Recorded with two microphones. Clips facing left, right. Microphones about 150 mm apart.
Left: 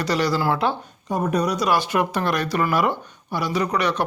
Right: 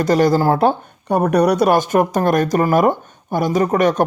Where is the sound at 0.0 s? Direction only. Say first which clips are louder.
Right 7 dB; 50° right (ahead or behind).